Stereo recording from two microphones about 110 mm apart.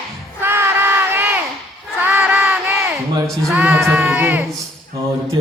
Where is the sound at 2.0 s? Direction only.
15° right (ahead or behind).